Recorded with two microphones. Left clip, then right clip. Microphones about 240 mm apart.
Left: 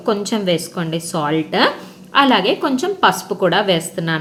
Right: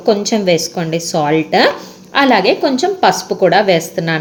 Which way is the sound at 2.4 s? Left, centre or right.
Centre.